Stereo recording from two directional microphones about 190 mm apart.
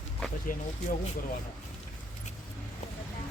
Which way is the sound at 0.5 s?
45° left (ahead or behind).